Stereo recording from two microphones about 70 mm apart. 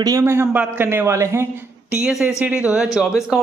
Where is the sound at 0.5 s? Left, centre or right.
Right.